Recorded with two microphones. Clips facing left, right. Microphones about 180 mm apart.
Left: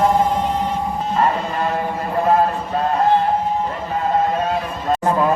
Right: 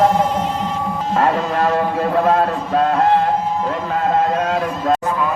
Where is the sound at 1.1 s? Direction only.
90° right.